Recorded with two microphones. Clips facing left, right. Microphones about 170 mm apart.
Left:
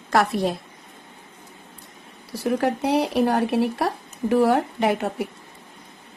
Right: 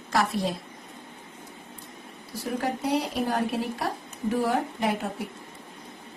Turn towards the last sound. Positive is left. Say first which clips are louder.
# left 6 dB
turn(degrees=70)  # may be behind; listen again after turning